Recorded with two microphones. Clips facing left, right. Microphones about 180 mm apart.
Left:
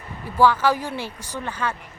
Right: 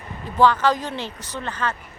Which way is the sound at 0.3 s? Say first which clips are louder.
Even; 10° left (ahead or behind).